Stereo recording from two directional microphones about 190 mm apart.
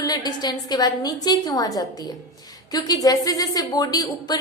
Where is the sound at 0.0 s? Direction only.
20° left (ahead or behind).